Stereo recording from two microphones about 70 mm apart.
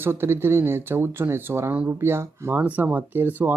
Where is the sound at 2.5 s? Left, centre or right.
Right.